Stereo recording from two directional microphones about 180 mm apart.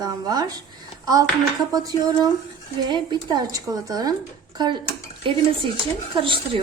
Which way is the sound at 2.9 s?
25° right (ahead or behind).